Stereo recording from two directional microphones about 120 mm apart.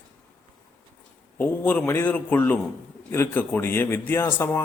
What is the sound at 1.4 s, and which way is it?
A man's voice, 10° left (ahead or behind).